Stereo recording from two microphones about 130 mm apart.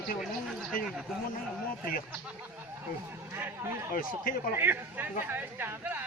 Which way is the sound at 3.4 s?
15° right (ahead or behind).